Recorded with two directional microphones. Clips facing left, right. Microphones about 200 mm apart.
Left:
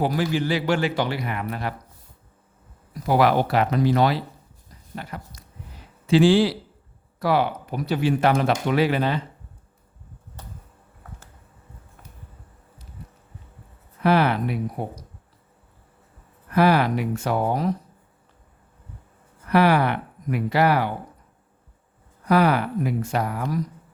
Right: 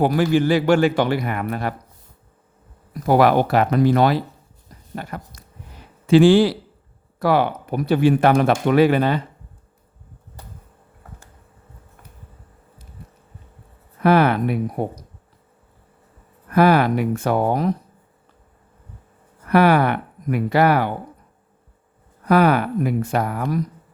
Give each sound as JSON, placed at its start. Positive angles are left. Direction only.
{"t": 0.0, "sound": "speech", "side_deg": -55}
{"t": 3.1, "sound": "speech", "side_deg": -50}
{"t": 14.0, "sound": "speech", "side_deg": -55}
{"t": 16.5, "sound": "speech", "side_deg": -55}
{"t": 19.5, "sound": "speech", "side_deg": -55}
{"t": 22.3, "sound": "speech", "side_deg": -55}